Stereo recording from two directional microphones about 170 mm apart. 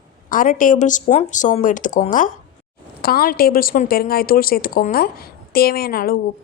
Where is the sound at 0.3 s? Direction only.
50° left (ahead or behind).